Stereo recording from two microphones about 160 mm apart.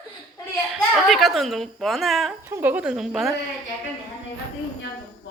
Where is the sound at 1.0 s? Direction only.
Centre (ahead or behind).